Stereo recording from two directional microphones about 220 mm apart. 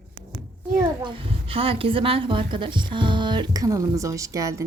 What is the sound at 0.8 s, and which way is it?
A child's voice, 25° right (ahead or behind).